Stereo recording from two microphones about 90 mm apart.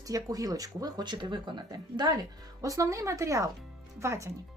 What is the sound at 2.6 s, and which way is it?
Speech, 40° right (ahead or behind).